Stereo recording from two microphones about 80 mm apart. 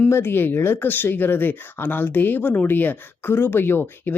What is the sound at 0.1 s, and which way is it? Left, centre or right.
Speech, left.